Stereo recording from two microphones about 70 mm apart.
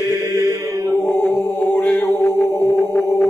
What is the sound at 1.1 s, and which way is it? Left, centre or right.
A capella, left.